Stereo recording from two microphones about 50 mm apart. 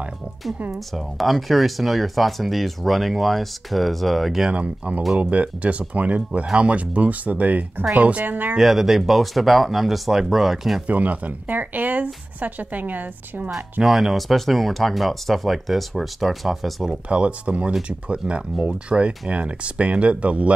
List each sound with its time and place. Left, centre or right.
0.7 s speech: centre
4.5 s speech: right
8.5 s speech: centre
10.9 s speech: right
13.8 s speech: centre
16.8 s speech: right